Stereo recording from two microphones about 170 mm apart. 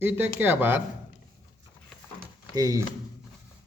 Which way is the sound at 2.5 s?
20° right (ahead or behind).